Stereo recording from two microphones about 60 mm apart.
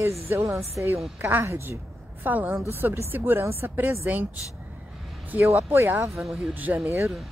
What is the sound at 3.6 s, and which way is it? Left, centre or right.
Speech, right.